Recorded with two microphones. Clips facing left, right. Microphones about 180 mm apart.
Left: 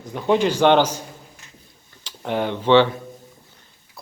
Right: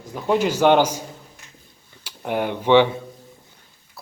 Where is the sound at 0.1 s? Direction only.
5° right (ahead or behind).